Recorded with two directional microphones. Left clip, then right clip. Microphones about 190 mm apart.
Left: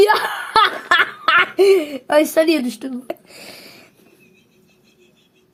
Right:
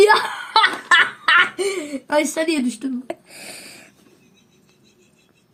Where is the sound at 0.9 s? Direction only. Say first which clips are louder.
Right 2 dB; 45° left (ahead or behind).